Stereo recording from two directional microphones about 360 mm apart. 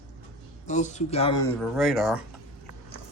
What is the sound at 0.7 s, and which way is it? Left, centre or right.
Speech, centre.